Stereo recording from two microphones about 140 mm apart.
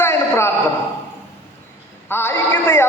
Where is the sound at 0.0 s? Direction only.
20° left (ahead or behind).